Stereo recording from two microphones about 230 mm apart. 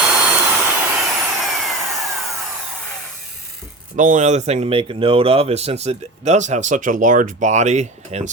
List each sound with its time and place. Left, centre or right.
0.1 s vacuum cleaner: centre
3.9 s speech: right